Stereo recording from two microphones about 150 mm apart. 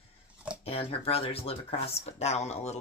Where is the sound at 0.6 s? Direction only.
40° left (ahead or behind).